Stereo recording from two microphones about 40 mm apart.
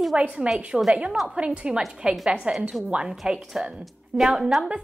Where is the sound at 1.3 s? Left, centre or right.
Right.